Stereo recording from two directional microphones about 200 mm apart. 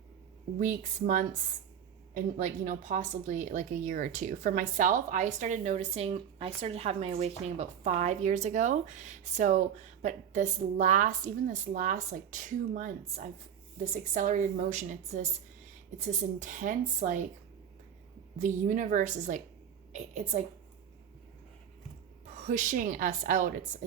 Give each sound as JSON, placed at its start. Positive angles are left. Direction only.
{"t": 0.6, "sound": "speech", "side_deg": -40}
{"t": 16.4, "sound": "speech", "side_deg": -40}
{"t": 18.3, "sound": "speech", "side_deg": -40}
{"t": 22.4, "sound": "speech", "side_deg": -35}